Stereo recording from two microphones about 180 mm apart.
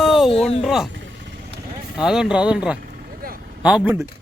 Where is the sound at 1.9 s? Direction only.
5° right (ahead or behind).